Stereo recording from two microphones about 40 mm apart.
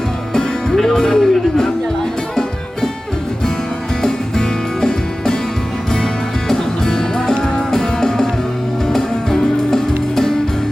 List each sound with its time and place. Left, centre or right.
0.3 s music: centre
1.0 s speech: left
4.0 s music: centre
6.5 s music: centre